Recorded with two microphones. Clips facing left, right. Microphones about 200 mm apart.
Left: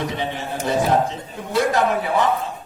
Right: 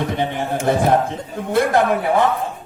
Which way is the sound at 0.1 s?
55° right (ahead or behind).